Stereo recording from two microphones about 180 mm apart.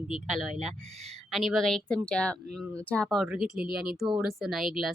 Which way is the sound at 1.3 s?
Centre (ahead or behind).